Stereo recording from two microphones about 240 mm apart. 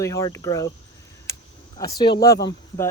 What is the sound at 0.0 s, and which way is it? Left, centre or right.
Speech, centre.